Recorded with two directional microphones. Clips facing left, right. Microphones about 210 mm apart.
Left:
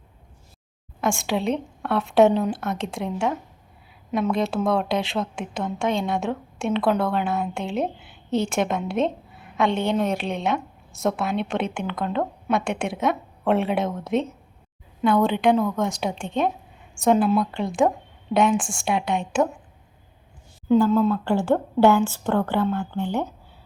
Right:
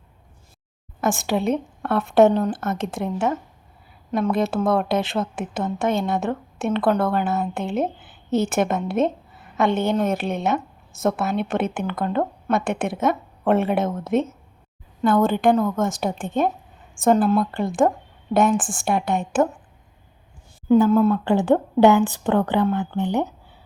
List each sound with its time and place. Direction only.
1.0 s a woman's voice: 5° right (ahead or behind)
21.2 s a woman's voice: 20° right (ahead or behind)